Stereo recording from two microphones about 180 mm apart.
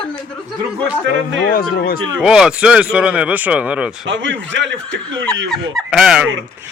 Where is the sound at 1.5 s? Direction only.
55° left (ahead or behind).